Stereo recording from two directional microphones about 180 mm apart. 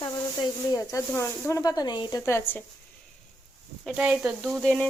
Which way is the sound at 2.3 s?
15° left (ahead or behind).